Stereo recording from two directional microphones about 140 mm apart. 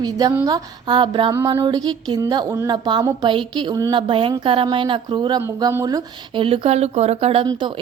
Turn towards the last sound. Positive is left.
turn(degrees=-35)  # may be behind; listen again after turning